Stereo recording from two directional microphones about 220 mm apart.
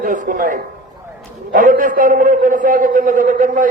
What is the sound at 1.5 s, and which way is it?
A man's voice, 40° right (ahead or behind).